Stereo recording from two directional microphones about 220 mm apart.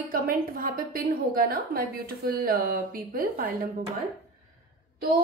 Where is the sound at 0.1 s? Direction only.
40° right (ahead or behind).